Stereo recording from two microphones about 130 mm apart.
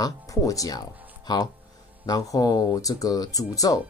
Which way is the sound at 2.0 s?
30° left (ahead or behind).